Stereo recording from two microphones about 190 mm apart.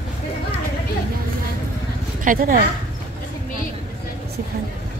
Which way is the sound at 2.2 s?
45° right (ahead or behind).